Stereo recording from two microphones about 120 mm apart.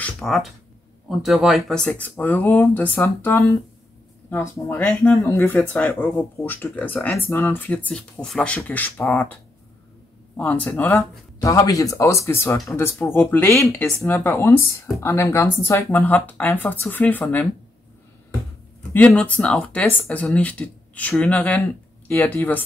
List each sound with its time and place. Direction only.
0.2 s speech: centre (ahead or behind)
1.9 s speech: 15° left (ahead or behind)
13.7 s speech: 5° left (ahead or behind)
18.9 s speech: 10° left (ahead or behind)